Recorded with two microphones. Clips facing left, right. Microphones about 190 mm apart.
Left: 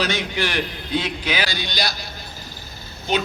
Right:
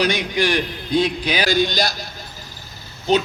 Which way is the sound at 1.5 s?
45° right (ahead or behind).